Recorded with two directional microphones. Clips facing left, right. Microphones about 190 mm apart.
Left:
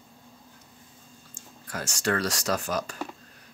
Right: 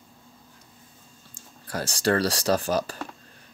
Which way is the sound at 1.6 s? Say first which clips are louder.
Right 4 dB; 35° right (ahead or behind).